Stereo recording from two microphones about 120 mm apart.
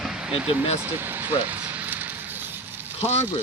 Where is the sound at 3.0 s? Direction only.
60° left (ahead or behind).